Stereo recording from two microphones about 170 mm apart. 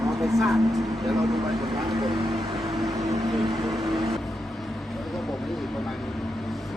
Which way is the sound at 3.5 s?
Centre (ahead or behind).